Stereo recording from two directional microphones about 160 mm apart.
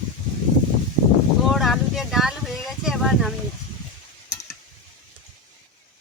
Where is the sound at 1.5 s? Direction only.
Centre (ahead or behind).